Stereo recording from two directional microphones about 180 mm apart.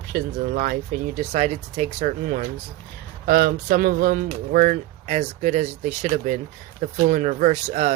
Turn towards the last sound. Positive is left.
turn(degrees=-45)  # may be behind; listen again after turning